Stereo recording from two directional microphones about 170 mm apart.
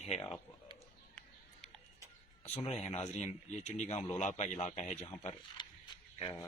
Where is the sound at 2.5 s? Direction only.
35° left (ahead or behind).